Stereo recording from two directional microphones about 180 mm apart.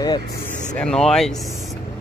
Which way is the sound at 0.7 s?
5° left (ahead or behind).